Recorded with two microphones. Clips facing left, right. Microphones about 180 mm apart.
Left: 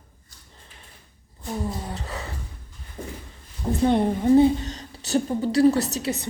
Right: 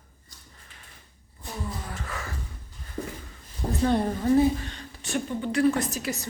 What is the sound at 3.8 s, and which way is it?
A woman's voice, 20° left (ahead or behind).